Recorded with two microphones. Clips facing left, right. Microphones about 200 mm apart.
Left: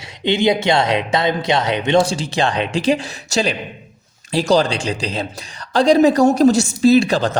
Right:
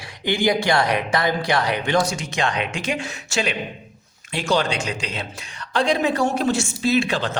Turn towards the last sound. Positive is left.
turn(degrees=40)  # may be behind; listen again after turning